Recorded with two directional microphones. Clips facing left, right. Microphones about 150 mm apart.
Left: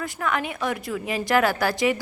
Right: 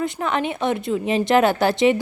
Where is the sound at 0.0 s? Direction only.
25° right (ahead or behind).